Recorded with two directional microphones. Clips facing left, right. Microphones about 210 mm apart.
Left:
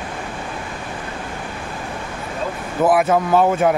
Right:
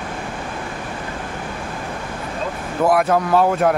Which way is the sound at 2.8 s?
Centre (ahead or behind).